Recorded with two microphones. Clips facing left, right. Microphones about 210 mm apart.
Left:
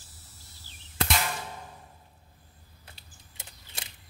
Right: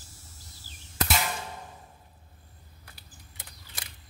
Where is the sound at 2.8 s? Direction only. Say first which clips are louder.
Right 1 dB; 25° left (ahead or behind).